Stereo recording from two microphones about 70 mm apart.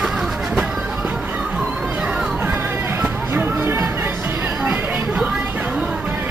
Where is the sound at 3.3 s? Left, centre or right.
Right.